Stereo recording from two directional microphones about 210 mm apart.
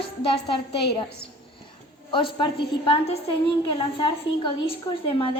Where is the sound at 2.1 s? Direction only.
25° left (ahead or behind).